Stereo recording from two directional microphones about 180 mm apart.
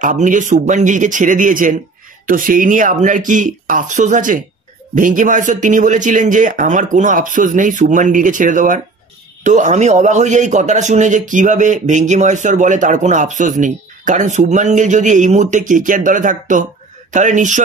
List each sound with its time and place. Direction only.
0.0 s a man's voice: 45° right (ahead or behind)